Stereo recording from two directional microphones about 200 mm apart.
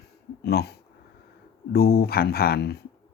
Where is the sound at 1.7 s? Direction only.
50° left (ahead or behind).